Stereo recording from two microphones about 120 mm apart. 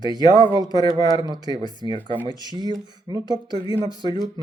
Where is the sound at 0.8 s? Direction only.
35° right (ahead or behind).